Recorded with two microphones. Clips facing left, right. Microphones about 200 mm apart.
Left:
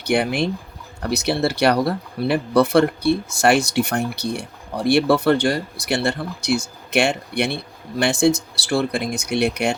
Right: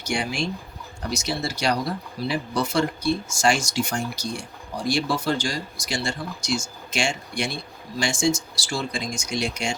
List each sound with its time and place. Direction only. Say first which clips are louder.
0.0 s speech: left 7 dB; 60° left (ahead or behind)